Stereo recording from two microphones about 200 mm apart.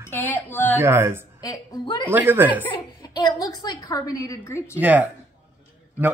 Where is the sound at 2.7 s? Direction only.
20° left (ahead or behind).